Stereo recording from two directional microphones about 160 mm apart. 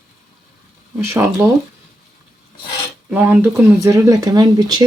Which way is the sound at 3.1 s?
10° right (ahead or behind).